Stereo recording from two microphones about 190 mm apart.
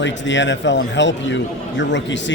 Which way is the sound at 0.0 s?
70° left (ahead or behind).